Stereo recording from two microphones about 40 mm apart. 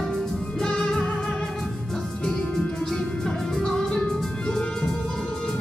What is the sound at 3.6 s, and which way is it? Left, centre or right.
Music, centre.